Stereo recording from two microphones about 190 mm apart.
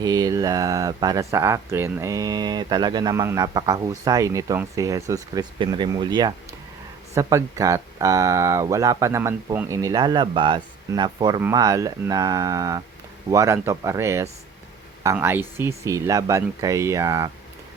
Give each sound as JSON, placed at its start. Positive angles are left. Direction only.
{"t": 0.0, "sound": "speech", "side_deg": -20}